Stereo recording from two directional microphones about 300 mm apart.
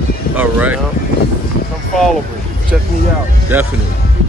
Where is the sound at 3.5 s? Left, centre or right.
Centre.